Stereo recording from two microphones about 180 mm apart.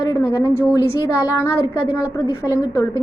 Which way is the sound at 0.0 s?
20° left (ahead or behind).